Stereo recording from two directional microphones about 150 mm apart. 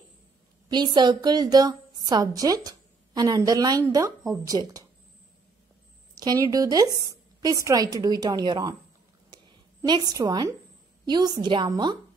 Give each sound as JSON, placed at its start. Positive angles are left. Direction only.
{"t": 0.7, "sound": "a woman's voice", "side_deg": -30}
{"t": 6.1, "sound": "a woman's voice", "side_deg": -25}
{"t": 9.3, "sound": "a sound", "side_deg": -30}
{"t": 11.1, "sound": "a woman's voice", "side_deg": -25}